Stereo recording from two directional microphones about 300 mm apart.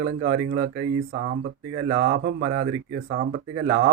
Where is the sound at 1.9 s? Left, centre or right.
Right.